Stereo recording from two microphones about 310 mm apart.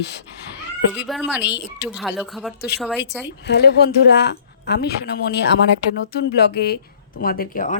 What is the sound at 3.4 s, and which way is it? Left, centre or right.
A woman's voice, left.